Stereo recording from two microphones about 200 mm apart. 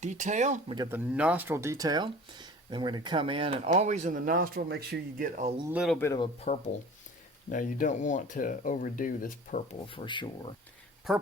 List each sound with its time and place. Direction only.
0.0 s speech: 35° right (ahead or behind)
0.8 s speech: 10° right (ahead or behind); by 5.5 s 40° right (ahead or behind)
5.6 s speech: 5° right (ahead or behind)
6.1 s speech: 30° left (ahead or behind)
9.8 s speech: 25° left (ahead or behind)
11.1 s speech: centre (ahead or behind)